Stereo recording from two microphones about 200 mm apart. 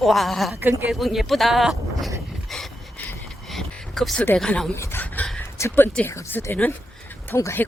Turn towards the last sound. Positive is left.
turn(degrees=10)  # may be behind; listen again after turning